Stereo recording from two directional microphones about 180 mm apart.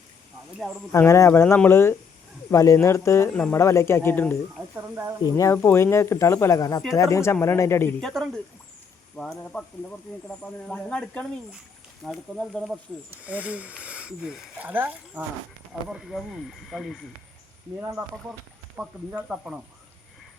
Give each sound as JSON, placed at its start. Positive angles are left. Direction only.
{"t": 0.9, "sound": "speech", "side_deg": 15}
{"t": 4.8, "sound": "speech", "side_deg": -15}
{"t": 5.2, "sound": "speech", "side_deg": 15}
{"t": 8.0, "sound": "speech", "side_deg": 5}
{"t": 18.8, "sound": "speech", "side_deg": -5}